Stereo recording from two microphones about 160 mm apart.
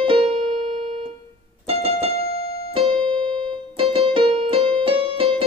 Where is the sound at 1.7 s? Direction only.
35° right (ahead or behind).